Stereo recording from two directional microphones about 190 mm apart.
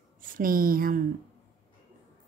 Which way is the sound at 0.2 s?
45° right (ahead or behind).